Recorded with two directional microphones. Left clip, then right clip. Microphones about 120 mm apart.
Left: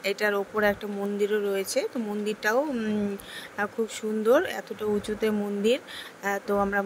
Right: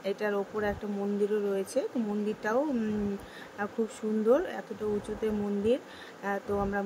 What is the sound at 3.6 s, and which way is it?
Speech, 35° left (ahead or behind).